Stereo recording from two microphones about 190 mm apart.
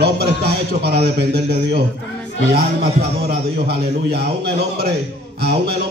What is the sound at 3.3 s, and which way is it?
Speech, 60° right (ahead or behind).